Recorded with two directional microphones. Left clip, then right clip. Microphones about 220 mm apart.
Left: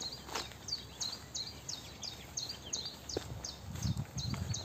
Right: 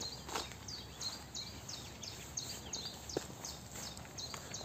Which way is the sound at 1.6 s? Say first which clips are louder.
Left 3 dB; 15° left (ahead or behind).